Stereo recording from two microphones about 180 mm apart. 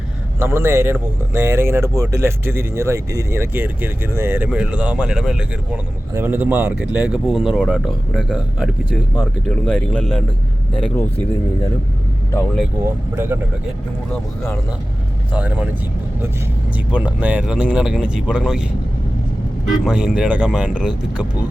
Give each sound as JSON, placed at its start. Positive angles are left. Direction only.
{"t": 0.3, "sound": "speech", "side_deg": -15}
{"t": 13.1, "sound": "speech", "side_deg": -10}
{"t": 15.3, "sound": "speech", "side_deg": -10}
{"t": 16.9, "sound": "speech", "side_deg": -10}
{"t": 19.8, "sound": "speech", "side_deg": -5}